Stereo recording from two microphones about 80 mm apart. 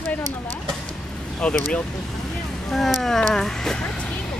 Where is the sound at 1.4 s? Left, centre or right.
Centre.